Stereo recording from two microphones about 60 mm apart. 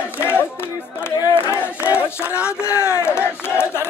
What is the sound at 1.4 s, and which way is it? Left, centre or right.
Battle cry, left.